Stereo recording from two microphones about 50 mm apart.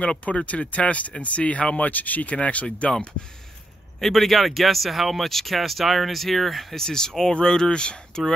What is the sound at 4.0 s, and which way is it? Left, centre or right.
Speech, centre.